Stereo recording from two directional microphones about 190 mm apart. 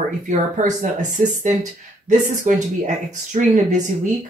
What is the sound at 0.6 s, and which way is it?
Speech, 40° right (ahead or behind).